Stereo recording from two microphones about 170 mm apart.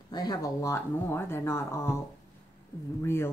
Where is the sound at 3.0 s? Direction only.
15° left (ahead or behind).